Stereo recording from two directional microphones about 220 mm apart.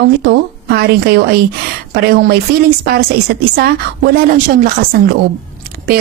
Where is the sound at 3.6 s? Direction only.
45° right (ahead or behind).